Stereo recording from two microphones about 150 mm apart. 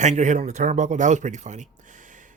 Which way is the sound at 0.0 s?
50° right (ahead or behind).